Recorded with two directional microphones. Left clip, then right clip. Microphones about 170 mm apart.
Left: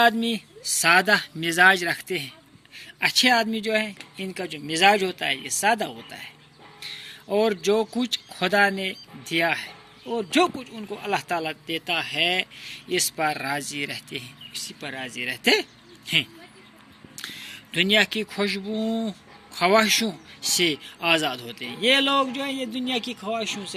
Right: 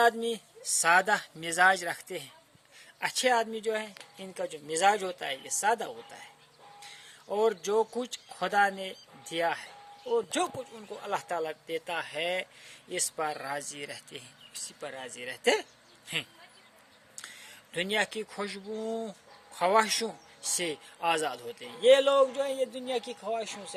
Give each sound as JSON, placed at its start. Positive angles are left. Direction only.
{"t": 0.0, "sound": "speech", "side_deg": -40}
{"t": 17.7, "sound": "speech", "side_deg": -50}